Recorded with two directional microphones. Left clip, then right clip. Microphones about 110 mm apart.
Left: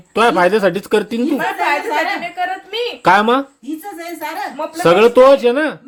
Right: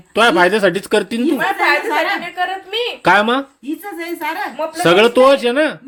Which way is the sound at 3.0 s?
15° left (ahead or behind).